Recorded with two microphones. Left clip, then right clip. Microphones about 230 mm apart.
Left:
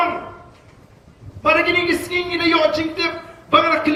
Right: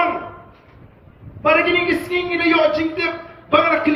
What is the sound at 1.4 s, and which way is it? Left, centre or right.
A man's voice, left.